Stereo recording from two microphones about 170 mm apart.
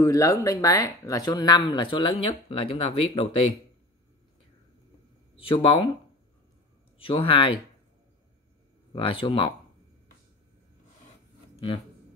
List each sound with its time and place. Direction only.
0.0 s speech: 20° left (ahead or behind); by 3.4 s 35° left (ahead or behind)
5.4 s speech: 30° left (ahead or behind)
7.0 s speech: 30° left (ahead or behind)
8.9 s speech: 30° left (ahead or behind)